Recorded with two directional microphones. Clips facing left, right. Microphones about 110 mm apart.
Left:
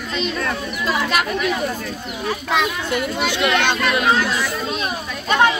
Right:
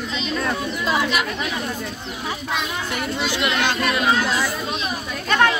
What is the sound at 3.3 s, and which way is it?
Speech, 25° left (ahead or behind).